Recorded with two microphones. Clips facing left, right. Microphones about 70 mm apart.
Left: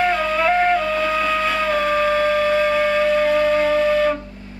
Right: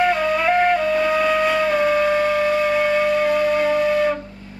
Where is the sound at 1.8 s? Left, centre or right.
Left.